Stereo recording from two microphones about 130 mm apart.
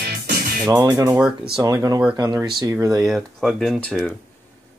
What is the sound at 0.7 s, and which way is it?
Speech, 25° right (ahead or behind).